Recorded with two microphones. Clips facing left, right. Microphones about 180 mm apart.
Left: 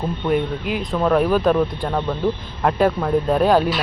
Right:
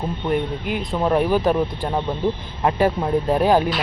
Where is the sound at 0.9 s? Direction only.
15° right (ahead or behind).